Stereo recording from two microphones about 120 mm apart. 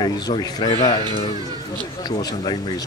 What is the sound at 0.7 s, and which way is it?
Speech, 70° left (ahead or behind).